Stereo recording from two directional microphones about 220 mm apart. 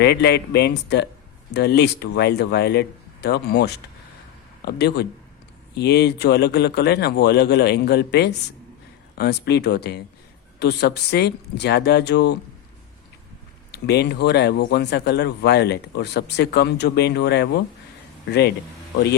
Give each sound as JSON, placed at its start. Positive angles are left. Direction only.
{"t": 0.0, "sound": "speech", "side_deg": 50}
{"t": 13.7, "sound": "speech", "side_deg": 50}